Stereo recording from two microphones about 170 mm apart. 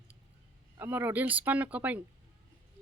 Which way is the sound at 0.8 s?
10° right (ahead or behind).